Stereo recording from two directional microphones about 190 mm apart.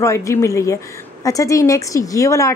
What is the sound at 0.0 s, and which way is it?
A woman's voice, 15° left (ahead or behind).